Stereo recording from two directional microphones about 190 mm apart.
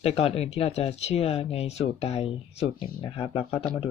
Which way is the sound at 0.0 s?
30° left (ahead or behind).